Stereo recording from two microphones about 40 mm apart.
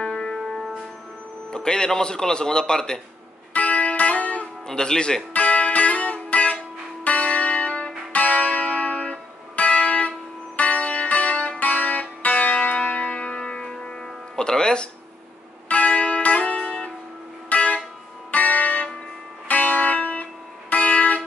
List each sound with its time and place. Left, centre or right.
0.0 s music: centre
1.5 s speech: left
3.5 s music: left
4.6 s speech: centre
5.3 s music: left
14.0 s music: centre
15.7 s music: left